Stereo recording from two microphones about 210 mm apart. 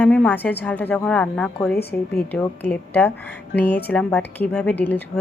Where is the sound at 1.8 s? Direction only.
50° left (ahead or behind).